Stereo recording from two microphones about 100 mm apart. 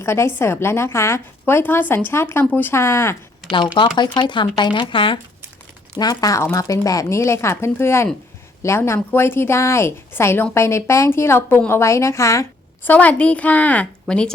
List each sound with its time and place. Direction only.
0.0 s a woman's voice: 25° left (ahead or behind)
3.8 s speech: 50° left (ahead or behind)
6.0 s a woman's voice: 40° left (ahead or behind)
12.8 s a woman's voice: 15° left (ahead or behind)